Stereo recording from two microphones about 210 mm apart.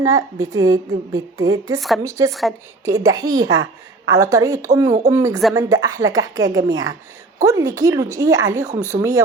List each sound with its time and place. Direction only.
0.0 s a woman's voice: 15° right (ahead or behind)